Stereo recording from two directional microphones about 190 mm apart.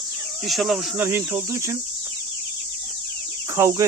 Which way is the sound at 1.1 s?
15° right (ahead or behind).